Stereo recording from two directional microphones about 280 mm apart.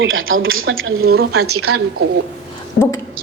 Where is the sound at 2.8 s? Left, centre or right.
Left.